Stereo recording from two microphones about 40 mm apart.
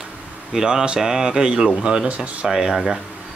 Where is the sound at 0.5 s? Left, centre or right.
Centre.